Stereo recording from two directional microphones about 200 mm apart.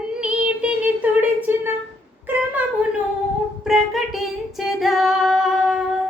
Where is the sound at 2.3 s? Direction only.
5° right (ahead or behind).